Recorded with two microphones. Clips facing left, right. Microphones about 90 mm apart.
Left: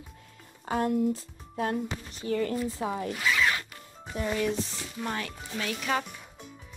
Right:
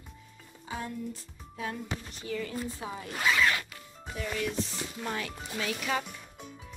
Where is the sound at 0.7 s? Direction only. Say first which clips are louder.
Left 11 dB; 60° left (ahead or behind).